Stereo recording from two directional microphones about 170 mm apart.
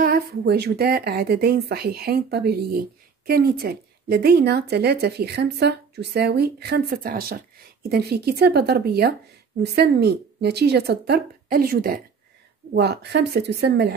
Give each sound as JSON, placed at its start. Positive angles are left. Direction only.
{"t": 0.0, "sound": "speech", "side_deg": -65}
{"t": 12.7, "sound": "speech", "side_deg": -75}